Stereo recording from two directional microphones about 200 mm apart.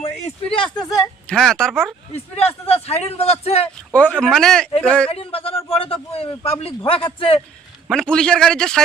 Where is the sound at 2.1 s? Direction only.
30° left (ahead or behind).